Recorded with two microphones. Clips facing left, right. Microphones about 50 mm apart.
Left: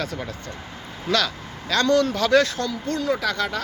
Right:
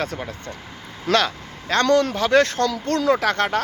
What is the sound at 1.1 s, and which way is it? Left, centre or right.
Speech, right.